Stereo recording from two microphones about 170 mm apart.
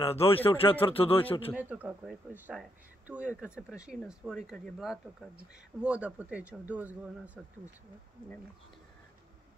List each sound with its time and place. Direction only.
0.0 s speech: 35° left (ahead or behind)
1.5 s speech: 10° right (ahead or behind)